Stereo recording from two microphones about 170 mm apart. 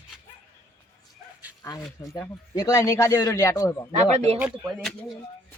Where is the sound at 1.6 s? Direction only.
20° left (ahead or behind).